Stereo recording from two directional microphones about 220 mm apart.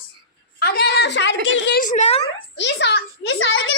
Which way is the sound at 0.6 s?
45° left (ahead or behind).